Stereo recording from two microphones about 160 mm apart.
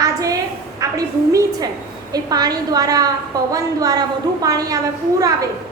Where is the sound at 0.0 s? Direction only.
20° right (ahead or behind).